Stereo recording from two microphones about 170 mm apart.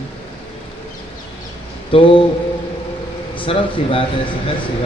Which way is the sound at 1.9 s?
30° left (ahead or behind).